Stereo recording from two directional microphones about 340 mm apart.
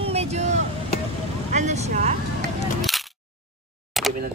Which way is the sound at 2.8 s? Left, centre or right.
Centre.